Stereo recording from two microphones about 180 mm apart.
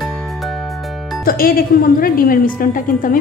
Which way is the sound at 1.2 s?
55° left (ahead or behind).